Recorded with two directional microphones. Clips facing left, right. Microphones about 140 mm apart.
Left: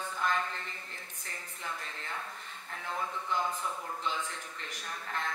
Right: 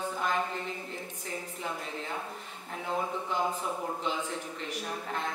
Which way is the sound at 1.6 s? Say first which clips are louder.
Right 3 dB; 20° right (ahead or behind).